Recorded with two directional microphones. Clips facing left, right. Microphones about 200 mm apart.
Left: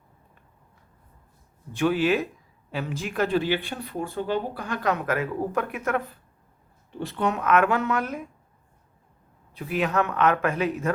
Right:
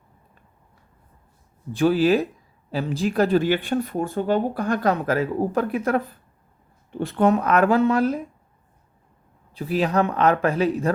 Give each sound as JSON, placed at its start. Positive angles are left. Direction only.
{"t": 1.7, "sound": "speech", "side_deg": -35}
{"t": 7.0, "sound": "speech", "side_deg": -55}
{"t": 7.3, "sound": "speech", "side_deg": -35}
{"t": 9.6, "sound": "speech", "side_deg": -35}